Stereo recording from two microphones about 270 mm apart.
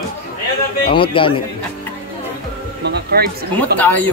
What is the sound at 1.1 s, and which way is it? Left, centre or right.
Speech, centre.